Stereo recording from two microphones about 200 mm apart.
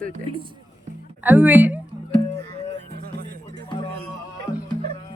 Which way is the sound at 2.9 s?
50° right (ahead or behind).